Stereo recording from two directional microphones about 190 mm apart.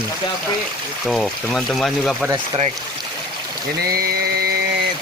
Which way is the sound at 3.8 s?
55° right (ahead or behind).